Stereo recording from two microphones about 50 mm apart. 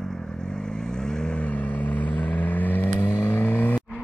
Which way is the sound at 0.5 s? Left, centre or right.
Centre.